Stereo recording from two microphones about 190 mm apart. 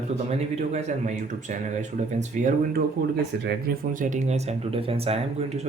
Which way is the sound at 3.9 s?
40° right (ahead or behind).